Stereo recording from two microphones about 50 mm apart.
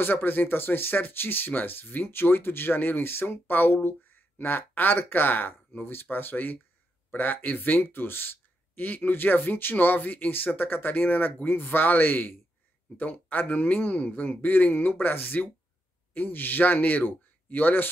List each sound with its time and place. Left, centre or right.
0.0 s speech: left